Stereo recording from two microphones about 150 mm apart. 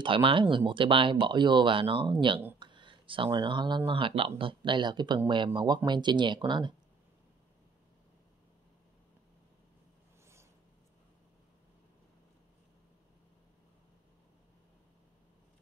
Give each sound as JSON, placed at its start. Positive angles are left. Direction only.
{"t": 0.0, "sound": "speech", "side_deg": -35}